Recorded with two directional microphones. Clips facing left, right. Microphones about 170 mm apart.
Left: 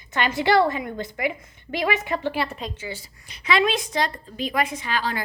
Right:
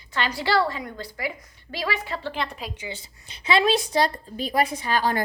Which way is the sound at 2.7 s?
15° right (ahead or behind).